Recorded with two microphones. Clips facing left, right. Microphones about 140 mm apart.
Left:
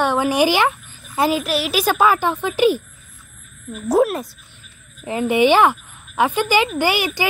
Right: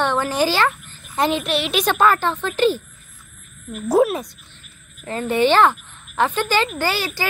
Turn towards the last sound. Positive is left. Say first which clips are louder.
# left 4 dB
turn(degrees=15)  # may be behind; listen again after turning